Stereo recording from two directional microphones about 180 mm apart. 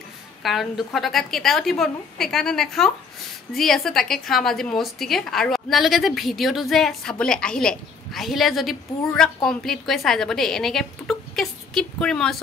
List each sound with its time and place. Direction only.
0.4 s a woman's voice: centre (ahead or behind)